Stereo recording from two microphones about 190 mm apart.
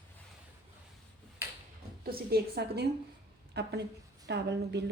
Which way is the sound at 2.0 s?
55° right (ahead or behind).